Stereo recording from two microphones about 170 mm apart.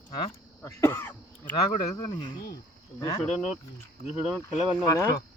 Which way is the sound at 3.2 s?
5° left (ahead or behind).